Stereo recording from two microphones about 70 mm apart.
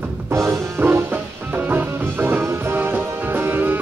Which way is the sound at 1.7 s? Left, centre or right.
Right.